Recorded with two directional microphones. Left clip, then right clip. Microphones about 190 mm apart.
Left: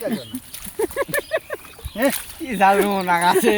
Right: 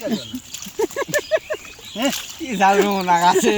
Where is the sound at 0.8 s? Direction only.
35° right (ahead or behind).